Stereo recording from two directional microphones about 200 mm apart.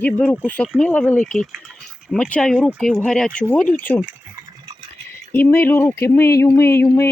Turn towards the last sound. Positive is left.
turn(degrees=15)  # may be behind; listen again after turning